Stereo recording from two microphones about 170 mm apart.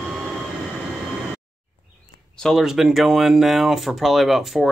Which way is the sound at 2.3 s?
Centre (ahead or behind).